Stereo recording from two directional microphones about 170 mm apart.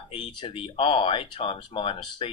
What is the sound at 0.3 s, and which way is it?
Speech, 30° left (ahead or behind).